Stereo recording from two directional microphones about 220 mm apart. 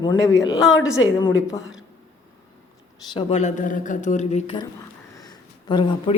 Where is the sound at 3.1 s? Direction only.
30° left (ahead or behind).